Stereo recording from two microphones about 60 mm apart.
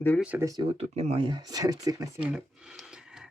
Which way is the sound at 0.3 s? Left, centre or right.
Right.